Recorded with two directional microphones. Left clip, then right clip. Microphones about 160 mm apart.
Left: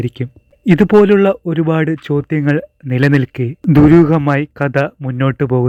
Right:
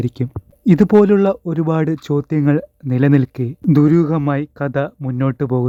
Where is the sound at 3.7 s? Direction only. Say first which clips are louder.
Left 6 dB; 25° left (ahead or behind).